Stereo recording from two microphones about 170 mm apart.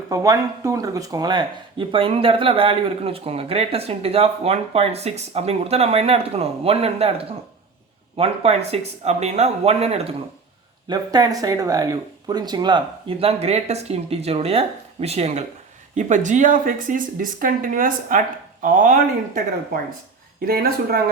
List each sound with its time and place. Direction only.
0.1 s speech: 20° right (ahead or behind); by 7.1 s 35° right (ahead or behind)
8.1 s speech: 35° right (ahead or behind)
10.8 s speech: 25° right (ahead or behind); by 21.0 s 60° right (ahead or behind)